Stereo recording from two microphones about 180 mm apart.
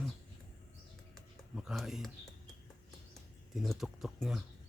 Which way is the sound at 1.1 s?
Centre (ahead or behind).